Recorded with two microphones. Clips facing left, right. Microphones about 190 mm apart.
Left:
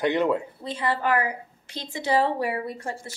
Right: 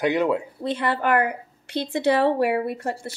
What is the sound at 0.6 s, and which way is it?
A woman's voice, 65° right (ahead or behind).